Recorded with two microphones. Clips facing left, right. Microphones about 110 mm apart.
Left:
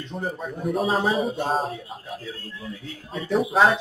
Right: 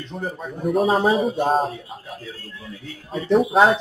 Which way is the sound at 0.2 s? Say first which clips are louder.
Right 2 dB; centre (ahead or behind).